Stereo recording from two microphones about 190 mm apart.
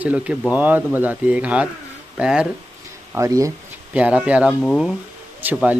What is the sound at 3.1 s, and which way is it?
Speech, 15° right (ahead or behind).